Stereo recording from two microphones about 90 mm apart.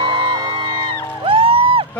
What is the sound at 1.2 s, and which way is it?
Music, 90° right.